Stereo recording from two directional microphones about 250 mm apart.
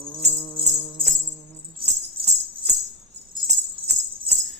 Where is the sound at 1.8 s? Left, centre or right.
Right.